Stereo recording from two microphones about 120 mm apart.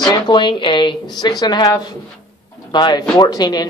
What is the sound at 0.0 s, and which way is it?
Speech, 40° left (ahead or behind).